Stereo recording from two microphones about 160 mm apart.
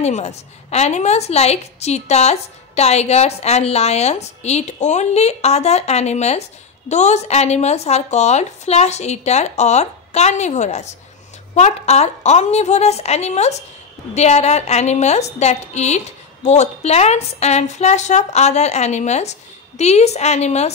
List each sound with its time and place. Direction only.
0.0 s a woman's voice: 45° left (ahead or behind)